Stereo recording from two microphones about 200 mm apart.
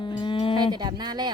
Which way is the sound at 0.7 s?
20° right (ahead or behind).